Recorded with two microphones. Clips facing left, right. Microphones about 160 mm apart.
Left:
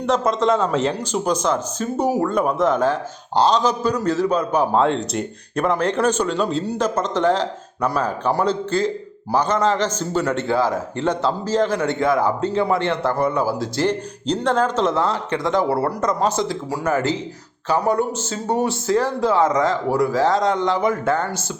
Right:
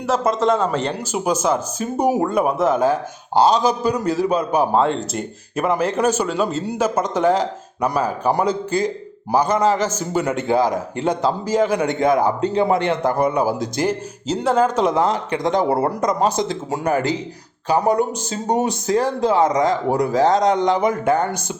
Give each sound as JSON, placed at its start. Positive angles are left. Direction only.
{"t": 0.0, "sound": "a man's voice", "side_deg": -5}